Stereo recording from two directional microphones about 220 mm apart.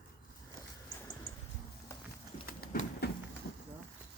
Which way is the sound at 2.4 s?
40° left (ahead or behind).